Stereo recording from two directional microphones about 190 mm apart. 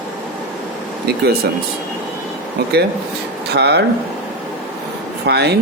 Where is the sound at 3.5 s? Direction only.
60° right (ahead or behind).